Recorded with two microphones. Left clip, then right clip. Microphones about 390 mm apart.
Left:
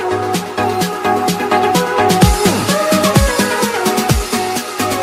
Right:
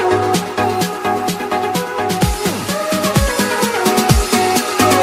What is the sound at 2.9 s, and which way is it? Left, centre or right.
Music, left.